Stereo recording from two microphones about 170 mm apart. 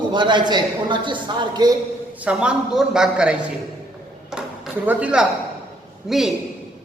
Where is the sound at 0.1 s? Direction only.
25° right (ahead or behind).